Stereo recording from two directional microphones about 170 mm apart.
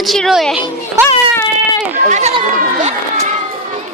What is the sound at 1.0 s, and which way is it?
Speech, 15° right (ahead or behind).